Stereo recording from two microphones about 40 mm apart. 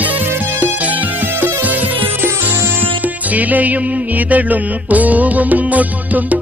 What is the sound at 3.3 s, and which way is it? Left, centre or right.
Music, right.